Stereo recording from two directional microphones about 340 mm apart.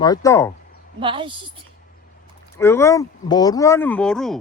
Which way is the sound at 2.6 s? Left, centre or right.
Centre.